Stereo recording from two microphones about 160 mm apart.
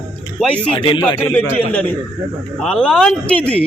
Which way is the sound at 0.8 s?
30° left (ahead or behind).